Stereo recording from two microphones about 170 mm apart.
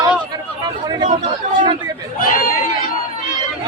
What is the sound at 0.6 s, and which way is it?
Speech, 25° right (ahead or behind).